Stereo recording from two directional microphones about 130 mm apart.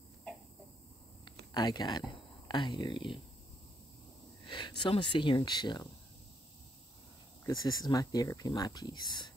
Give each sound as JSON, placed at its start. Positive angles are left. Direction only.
{"t": 0.3, "sound": "a sound", "side_deg": 5}
{"t": 1.2, "sound": "speech", "side_deg": 35}
{"t": 4.5, "sound": "speech", "side_deg": 35}
{"t": 7.4, "sound": "speech", "side_deg": 30}